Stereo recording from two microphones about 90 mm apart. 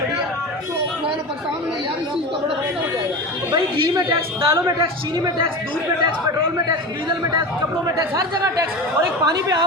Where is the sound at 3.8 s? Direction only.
35° right (ahead or behind).